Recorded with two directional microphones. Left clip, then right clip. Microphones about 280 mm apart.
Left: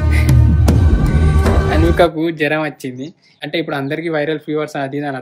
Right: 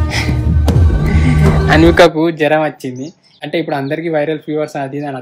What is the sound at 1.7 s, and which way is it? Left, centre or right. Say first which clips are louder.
Speech: right 7 dB; right.